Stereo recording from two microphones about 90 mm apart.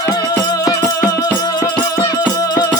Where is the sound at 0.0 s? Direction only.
45° left (ahead or behind).